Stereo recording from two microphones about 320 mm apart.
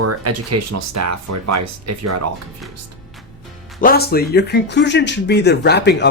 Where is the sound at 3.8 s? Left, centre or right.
Left.